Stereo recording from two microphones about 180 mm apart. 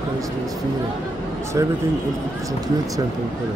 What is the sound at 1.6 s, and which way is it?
Speech, 15° right (ahead or behind).